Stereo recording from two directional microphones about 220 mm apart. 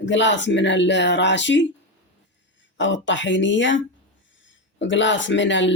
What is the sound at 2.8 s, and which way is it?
Speech, 55° left (ahead or behind).